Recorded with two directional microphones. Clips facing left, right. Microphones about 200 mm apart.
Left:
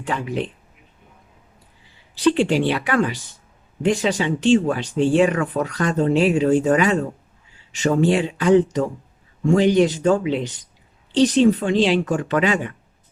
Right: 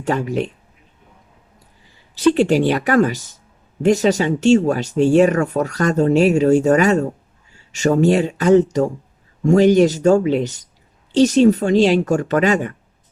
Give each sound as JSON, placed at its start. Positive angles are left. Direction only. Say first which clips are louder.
{"t": 0.0, "sound": "speech", "louder": "right 5 dB", "side_deg": -45}
{"t": 2.1, "sound": "speech", "louder": "right 3 dB", "side_deg": -45}